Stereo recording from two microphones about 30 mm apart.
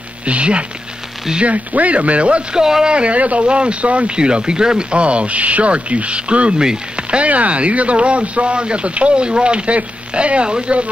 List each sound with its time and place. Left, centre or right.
0.2 s speech: right
1.4 s speech: right
2.5 s speech: right
2.9 s speech: right
3.2 s speech: right
3.4 s speech: right
4.1 s speech: right
4.9 s speech: right
7.0 s a sound: right
7.2 s speech: right